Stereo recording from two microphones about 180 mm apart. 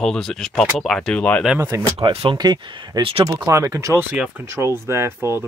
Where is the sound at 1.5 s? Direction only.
15° right (ahead or behind).